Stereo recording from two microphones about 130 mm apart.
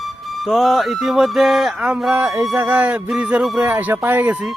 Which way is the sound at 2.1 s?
20° right (ahead or behind).